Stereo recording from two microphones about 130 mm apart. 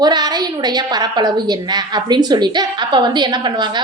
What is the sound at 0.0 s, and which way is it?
A woman's voice, 30° right (ahead or behind).